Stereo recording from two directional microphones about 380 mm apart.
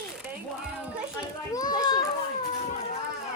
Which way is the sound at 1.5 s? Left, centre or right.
Centre.